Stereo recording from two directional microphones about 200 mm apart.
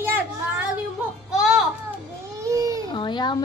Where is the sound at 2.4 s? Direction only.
15° right (ahead or behind).